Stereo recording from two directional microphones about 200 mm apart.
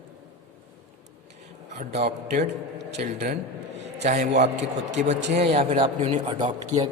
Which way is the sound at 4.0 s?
35° right (ahead or behind).